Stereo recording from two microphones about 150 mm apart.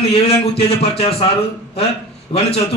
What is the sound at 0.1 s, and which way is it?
A man's voice, 40° left (ahead or behind).